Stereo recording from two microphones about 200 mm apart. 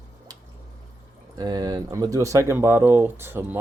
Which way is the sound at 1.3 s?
20° right (ahead or behind).